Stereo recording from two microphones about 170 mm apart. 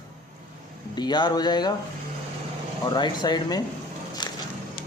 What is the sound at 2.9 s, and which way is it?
Speech, 25° left (ahead or behind).